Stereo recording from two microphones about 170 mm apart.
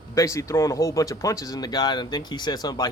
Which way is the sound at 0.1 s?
20° left (ahead or behind).